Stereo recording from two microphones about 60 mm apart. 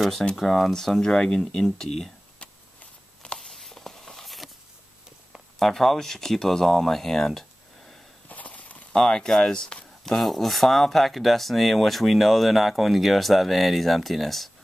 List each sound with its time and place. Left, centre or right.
0.4 s speech: centre
2.3 s a sound: centre
3.3 s a sound: centre
5.6 s speech: centre
8.3 s clip-clop: left
8.9 s speech: centre